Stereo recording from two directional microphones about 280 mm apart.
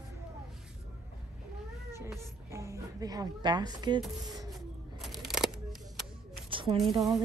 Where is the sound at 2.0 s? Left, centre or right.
Centre.